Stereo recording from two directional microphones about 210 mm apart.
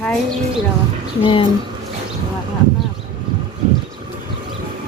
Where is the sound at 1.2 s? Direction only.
25° left (ahead or behind).